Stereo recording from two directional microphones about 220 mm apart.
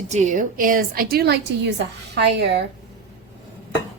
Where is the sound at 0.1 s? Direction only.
35° right (ahead or behind); by 2.6 s 50° right (ahead or behind).